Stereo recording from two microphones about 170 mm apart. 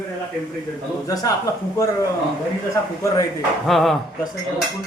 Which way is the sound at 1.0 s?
20° left (ahead or behind).